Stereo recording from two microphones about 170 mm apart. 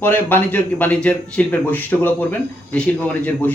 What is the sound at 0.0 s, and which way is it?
Speech, 10° left (ahead or behind).